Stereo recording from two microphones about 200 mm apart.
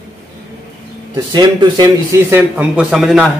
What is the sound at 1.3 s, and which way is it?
A man's voice, 20° right (ahead or behind).